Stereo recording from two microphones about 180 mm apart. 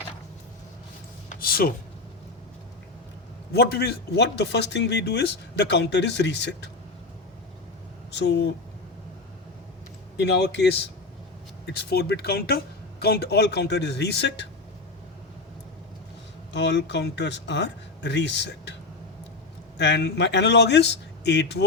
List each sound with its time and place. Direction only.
1.4 s speech: 55° left (ahead or behind)
3.5 s speech: 60° left (ahead or behind)
8.1 s speech: 70° left (ahead or behind)
10.2 s speech: 70° left (ahead or behind)
16.5 s speech: 75° left (ahead or behind)
19.8 s speech: 75° left (ahead or behind)